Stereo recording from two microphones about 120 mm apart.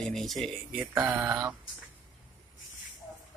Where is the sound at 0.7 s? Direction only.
15° right (ahead or behind).